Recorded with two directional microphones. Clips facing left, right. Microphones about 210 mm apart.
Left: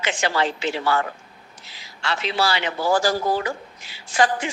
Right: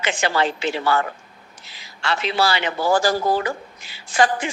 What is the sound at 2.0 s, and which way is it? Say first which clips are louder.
Speech: right 2 dB; 55° right (ahead or behind).